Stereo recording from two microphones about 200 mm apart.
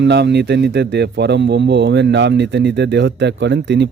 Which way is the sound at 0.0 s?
60° right (ahead or behind).